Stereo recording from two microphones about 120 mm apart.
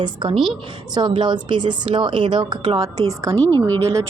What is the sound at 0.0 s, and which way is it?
A woman's voice, 40° right (ahead or behind).